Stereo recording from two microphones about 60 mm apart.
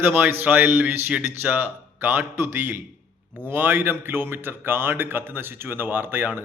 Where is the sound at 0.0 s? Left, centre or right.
Right.